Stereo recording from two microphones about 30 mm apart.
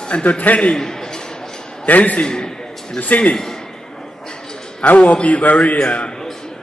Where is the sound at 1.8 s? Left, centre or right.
Left.